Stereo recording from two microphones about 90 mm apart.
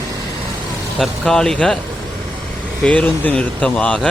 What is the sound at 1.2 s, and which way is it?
Speech, 5° left (ahead or behind).